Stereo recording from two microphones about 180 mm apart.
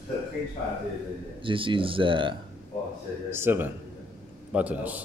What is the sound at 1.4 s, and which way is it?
Speech, 30° right (ahead or behind).